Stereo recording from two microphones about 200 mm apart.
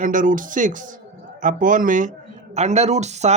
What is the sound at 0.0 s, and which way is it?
Speech, 40° right (ahead or behind).